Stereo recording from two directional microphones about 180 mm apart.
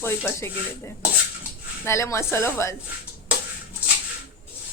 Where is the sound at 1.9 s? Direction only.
15° left (ahead or behind).